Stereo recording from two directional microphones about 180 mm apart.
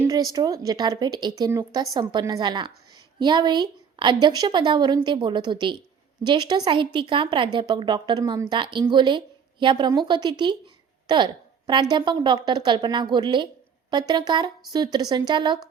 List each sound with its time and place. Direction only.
0.0 s a woman's voice: 20° right (ahead or behind)